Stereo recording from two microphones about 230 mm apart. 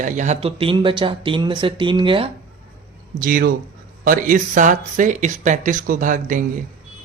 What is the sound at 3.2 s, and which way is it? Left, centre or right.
Speech, right.